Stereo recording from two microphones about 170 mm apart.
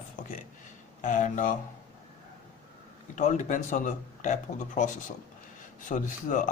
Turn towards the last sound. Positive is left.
turn(degrees=50)  # may be behind; listen again after turning